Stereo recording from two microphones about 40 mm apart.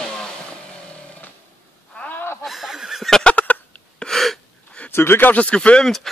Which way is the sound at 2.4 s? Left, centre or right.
Centre.